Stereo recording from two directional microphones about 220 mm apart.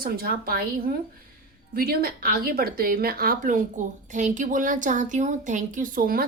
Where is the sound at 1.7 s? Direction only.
45° right (ahead or behind).